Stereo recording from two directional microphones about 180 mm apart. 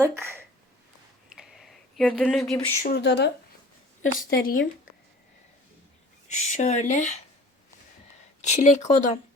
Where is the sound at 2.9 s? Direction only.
70° left (ahead or behind).